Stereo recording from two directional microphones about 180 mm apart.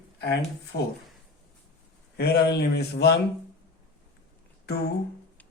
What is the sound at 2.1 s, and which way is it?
A man's voice, 65° left (ahead or behind).